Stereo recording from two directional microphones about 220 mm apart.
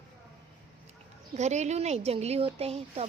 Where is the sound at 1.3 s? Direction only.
30° right (ahead or behind).